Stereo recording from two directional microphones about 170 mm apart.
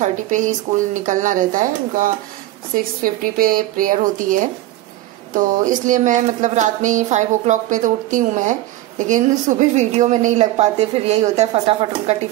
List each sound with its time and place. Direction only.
0.0 s a woman's voice: 45° right (ahead or behind)